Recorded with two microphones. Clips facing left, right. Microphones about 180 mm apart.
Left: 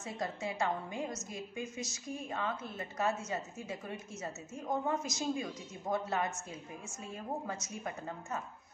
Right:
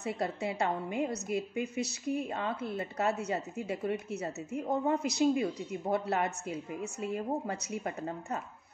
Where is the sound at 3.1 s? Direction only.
65° right (ahead or behind).